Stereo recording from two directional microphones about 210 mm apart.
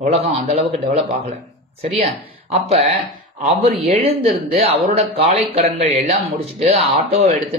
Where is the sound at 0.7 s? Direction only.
35° right (ahead or behind).